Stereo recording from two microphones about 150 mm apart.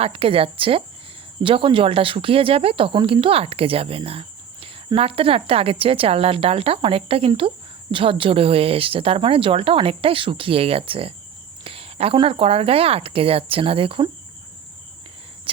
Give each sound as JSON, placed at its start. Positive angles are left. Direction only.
{"t": 0.0, "sound": "speech", "side_deg": -40}